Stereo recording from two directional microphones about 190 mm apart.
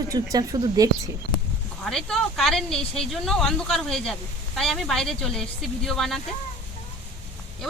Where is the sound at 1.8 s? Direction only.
Centre (ahead or behind).